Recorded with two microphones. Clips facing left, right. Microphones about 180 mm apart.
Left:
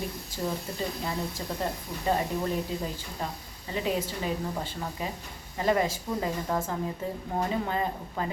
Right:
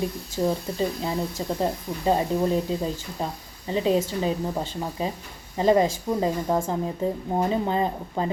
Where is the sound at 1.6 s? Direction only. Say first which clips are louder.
Right 6 dB; 25° right (ahead or behind).